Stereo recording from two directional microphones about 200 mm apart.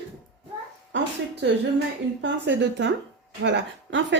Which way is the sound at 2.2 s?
65° right (ahead or behind).